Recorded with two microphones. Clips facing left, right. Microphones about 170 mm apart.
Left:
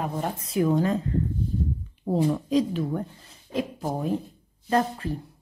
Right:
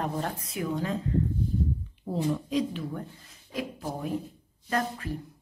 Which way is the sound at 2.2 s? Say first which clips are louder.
Left 2 dB; 40° left (ahead or behind).